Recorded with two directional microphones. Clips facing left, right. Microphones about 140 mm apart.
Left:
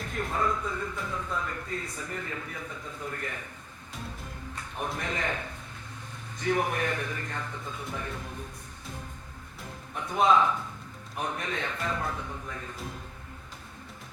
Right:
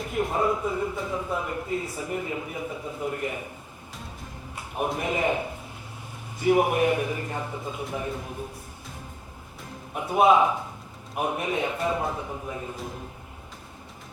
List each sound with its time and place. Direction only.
0.1 s speech: 20° right (ahead or behind)
4.5 s a sound: 15° right (ahead or behind)
4.9 s speech: 15° right (ahead or behind)
10.2 s speech: 15° right (ahead or behind)